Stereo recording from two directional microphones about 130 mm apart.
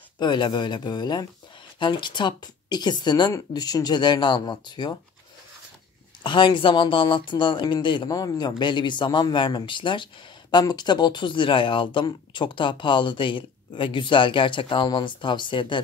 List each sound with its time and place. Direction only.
0.2 s speech: 35° left (ahead or behind)
6.2 s speech: 40° left (ahead or behind)